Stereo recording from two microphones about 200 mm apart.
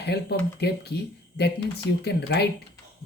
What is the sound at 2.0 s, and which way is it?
Speech, 55° left (ahead or behind).